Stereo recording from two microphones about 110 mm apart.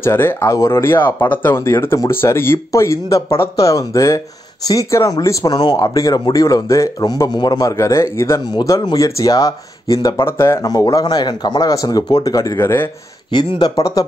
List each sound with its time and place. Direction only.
0.0 s speech: 20° left (ahead or behind)
12.5 s speech: 20° left (ahead or behind)
13.3 s speech: 40° left (ahead or behind)